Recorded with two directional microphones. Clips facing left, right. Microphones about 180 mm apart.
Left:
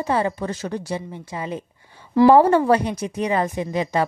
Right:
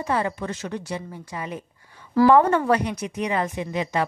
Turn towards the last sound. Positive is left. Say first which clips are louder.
# left 3 dB
turn(degrees=35)  # may be behind; listen again after turning